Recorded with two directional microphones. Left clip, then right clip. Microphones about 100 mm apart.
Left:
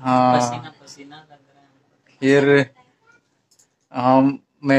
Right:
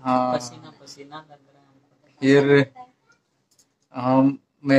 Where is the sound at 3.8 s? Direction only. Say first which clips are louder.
Left 4 dB; 25° left (ahead or behind).